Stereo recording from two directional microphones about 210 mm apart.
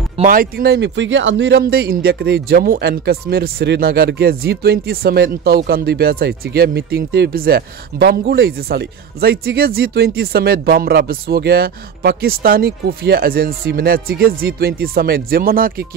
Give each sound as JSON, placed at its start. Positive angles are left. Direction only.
{"t": 0.2, "sound": "speech", "side_deg": -40}